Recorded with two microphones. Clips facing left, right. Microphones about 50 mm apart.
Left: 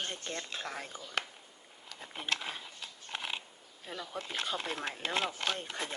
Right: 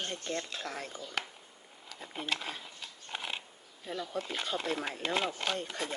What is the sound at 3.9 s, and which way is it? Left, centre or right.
Speech, centre.